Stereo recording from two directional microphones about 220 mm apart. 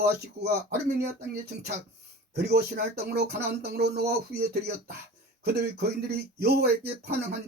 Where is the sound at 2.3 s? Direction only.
45° right (ahead or behind).